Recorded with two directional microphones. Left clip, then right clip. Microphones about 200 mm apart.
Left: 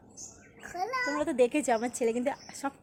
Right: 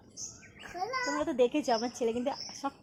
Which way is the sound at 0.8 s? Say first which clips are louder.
Left 2 dB; 35° left (ahead or behind).